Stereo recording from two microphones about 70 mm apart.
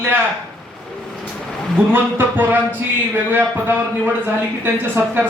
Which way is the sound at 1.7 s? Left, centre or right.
Right.